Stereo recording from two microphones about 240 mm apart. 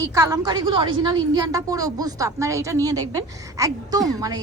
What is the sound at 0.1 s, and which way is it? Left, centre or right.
A woman's voice, centre.